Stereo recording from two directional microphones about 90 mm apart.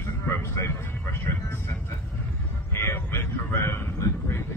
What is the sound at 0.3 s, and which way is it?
Vehicle, 30° left (ahead or behind).